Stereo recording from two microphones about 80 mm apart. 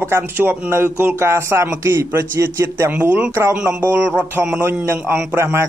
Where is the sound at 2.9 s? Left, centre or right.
Right.